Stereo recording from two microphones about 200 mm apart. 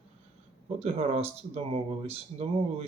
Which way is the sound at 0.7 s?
30° right (ahead or behind).